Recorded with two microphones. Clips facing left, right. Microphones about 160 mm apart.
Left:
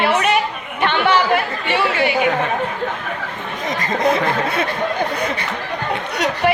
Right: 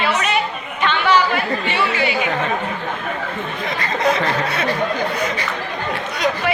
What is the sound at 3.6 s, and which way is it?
Speech, 45° left (ahead or behind).